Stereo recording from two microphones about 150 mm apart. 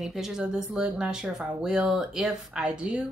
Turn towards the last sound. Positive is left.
turn(degrees=-5)  # may be behind; listen again after turning